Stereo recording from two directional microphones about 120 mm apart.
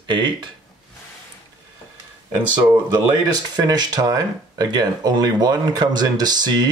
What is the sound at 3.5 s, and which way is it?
Speech, 35° right (ahead or behind).